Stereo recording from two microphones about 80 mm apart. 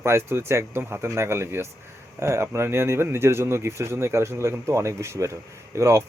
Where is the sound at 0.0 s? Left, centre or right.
Right.